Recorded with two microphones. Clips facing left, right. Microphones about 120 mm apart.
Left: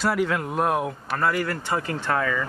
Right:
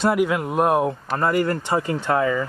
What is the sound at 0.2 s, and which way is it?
Speech, 15° right (ahead or behind).